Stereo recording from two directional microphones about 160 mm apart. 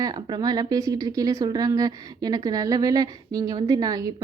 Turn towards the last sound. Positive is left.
turn(degrees=-20)  # may be behind; listen again after turning